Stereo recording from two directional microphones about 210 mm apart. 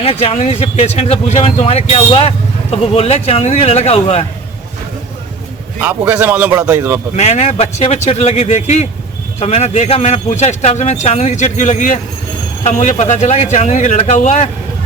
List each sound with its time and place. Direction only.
0.0 s speech: 30° left (ahead or behind)
5.8 s a man's voice: 5° right (ahead or behind)
7.2 s a man's voice: 30° left (ahead or behind)